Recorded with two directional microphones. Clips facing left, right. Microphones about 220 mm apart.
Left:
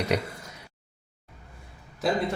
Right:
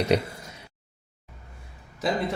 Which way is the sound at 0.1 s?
30° right (ahead or behind).